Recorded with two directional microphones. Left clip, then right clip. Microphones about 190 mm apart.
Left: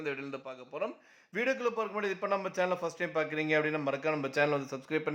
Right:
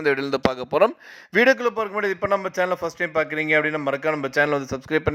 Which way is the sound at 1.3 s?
40° right (ahead or behind).